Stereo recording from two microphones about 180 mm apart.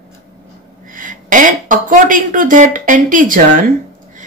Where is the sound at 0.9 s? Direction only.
45° right (ahead or behind).